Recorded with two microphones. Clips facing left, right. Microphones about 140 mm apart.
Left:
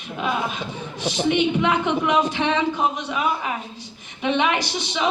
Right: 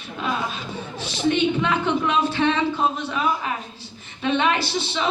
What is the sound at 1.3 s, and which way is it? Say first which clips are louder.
Speech: left 2 dB; 15° left (ahead or behind).